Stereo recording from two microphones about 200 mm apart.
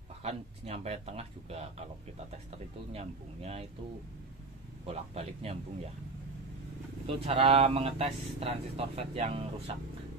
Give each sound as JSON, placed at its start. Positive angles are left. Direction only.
{"t": 0.2, "sound": "speech", "side_deg": -30}
{"t": 2.9, "sound": "speech", "side_deg": -30}
{"t": 4.8, "sound": "speech", "side_deg": -30}
{"t": 7.1, "sound": "speech", "side_deg": -30}